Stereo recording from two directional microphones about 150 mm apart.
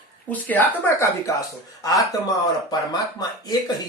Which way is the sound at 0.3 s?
10° left (ahead or behind).